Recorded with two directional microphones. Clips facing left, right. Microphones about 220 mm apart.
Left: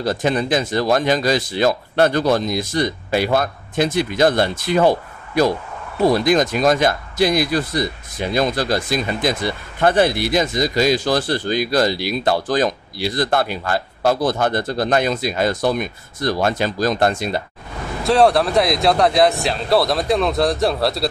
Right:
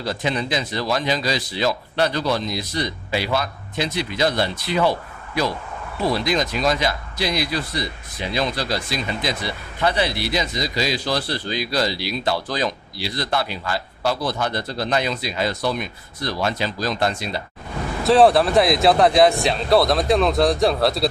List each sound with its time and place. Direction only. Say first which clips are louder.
0.0 s speech: left 5 dB; 45° left (ahead or behind)
18.0 s speech: even; centre (ahead or behind)